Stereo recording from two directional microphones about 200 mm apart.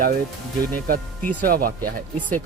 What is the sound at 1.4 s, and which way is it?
Speech, 45° right (ahead or behind).